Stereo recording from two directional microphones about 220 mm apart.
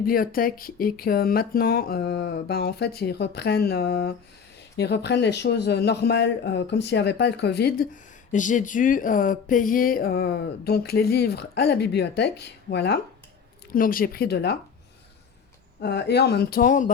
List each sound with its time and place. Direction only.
0.0 s speech: 40° left (ahead or behind)
8.3 s speech: 35° left (ahead or behind)
15.8 s speech: 50° left (ahead or behind)